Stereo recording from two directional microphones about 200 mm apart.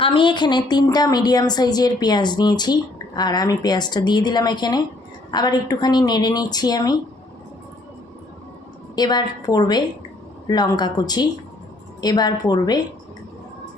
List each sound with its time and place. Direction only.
0.0 s a woman's voice: 25° left (ahead or behind)
9.0 s a woman's voice: 20° left (ahead or behind)